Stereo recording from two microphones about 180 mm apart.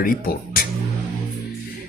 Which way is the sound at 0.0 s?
55° left (ahead or behind).